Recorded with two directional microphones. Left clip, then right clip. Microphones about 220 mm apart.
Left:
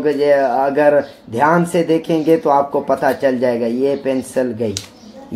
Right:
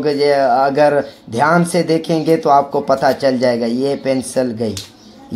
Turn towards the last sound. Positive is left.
turn(degrees=-20)  # may be behind; listen again after turning